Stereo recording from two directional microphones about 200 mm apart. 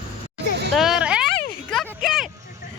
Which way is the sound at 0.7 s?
Centre (ahead or behind).